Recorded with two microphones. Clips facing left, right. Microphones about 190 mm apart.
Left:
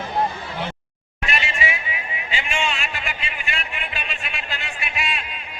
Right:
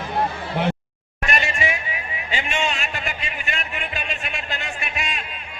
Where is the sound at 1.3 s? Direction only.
45° right (ahead or behind).